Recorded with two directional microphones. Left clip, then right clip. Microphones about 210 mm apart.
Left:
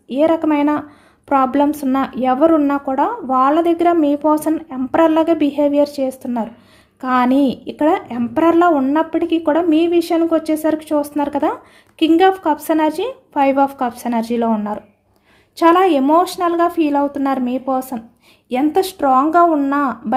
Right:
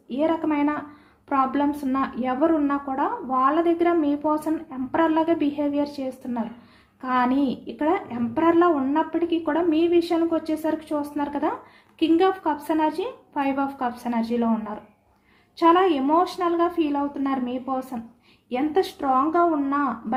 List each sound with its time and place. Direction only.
0.1 s a woman's voice: 55° left (ahead or behind)